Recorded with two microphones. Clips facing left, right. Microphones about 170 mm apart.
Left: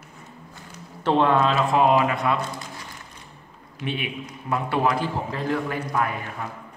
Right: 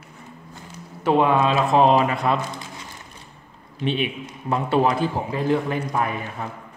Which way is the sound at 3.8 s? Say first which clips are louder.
Right 5 dB; 25° right (ahead or behind).